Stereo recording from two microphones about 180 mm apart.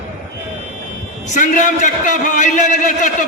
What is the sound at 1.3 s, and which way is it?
A man's voice, 45° left (ahead or behind).